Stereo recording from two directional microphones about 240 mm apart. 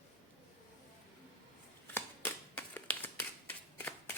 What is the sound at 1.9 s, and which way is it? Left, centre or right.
Finger snapping, centre.